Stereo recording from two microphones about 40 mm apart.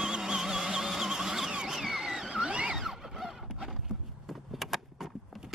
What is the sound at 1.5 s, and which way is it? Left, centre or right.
Vehicle, right.